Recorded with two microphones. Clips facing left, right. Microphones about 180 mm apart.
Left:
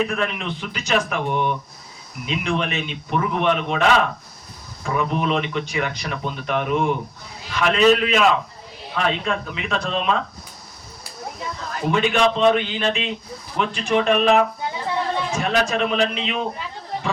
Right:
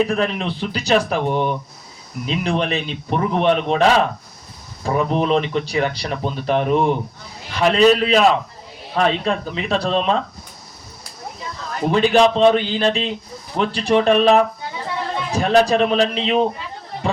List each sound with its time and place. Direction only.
0.0 s speech: 35° right (ahead or behind)
11.9 s speech: 35° right (ahead or behind)